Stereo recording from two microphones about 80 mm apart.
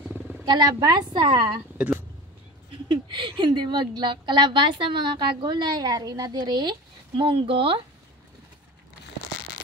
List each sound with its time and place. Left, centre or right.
0.5 s a woman's voice: right
2.9 s a woman's voice: right
7.2 s speech: right